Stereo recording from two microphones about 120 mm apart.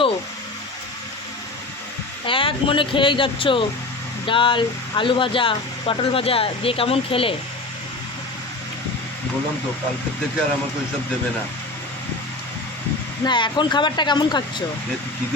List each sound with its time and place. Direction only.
2.2 s speech: 45° left (ahead or behind)
13.2 s speech: 40° left (ahead or behind)